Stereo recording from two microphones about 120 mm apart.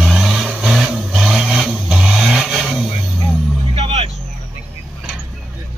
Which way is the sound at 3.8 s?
55° right (ahead or behind).